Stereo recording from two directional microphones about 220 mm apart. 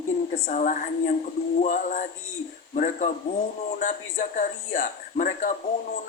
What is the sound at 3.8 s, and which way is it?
A man's voice, 35° left (ahead or behind).